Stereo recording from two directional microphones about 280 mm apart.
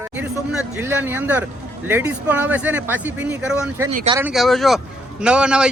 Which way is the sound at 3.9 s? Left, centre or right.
Right.